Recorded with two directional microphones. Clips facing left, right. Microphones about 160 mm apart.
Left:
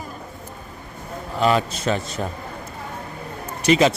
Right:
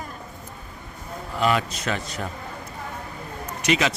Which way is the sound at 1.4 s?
30° left (ahead or behind).